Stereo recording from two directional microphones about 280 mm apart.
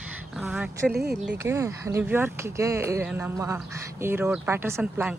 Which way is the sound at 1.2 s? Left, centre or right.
Centre.